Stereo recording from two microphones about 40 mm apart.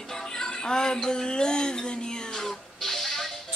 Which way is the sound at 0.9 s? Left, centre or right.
Centre.